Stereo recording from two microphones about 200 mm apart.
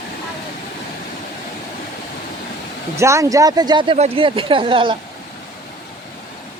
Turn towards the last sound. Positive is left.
turn(degrees=-25)  # may be behind; listen again after turning